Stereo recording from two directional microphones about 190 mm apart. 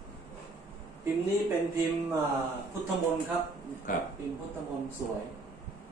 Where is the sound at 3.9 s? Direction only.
45° left (ahead or behind).